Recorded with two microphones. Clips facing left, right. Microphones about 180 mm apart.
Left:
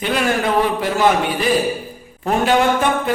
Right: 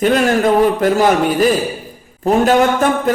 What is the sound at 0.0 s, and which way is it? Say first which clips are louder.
A man's voice: right 6 dB; 45° right (ahead or behind).